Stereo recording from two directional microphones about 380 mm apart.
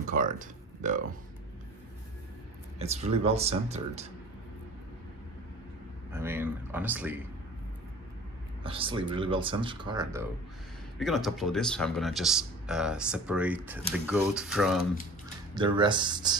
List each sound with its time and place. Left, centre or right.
0.1 s speech: right
2.8 s speech: centre
6.1 s speech: centre
8.6 s speech: centre
11.0 s speech: centre
15.5 s speech: centre